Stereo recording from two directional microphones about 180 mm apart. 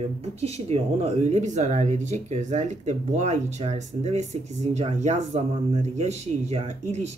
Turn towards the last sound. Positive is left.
turn(degrees=-40)  # may be behind; listen again after turning